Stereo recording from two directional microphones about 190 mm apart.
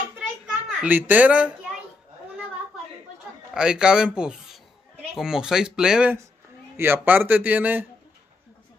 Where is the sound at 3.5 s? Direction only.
5° right (ahead or behind).